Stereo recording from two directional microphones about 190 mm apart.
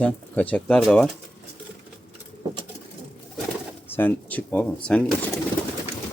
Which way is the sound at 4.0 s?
10° left (ahead or behind).